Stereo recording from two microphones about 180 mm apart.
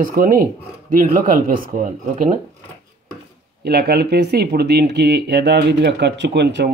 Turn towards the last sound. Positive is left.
turn(degrees=-70)  # may be behind; listen again after turning